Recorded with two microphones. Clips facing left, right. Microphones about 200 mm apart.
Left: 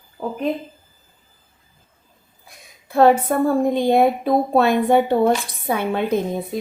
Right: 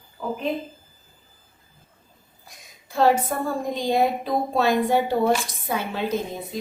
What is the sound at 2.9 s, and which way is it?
A woman's voice, 60° left (ahead or behind).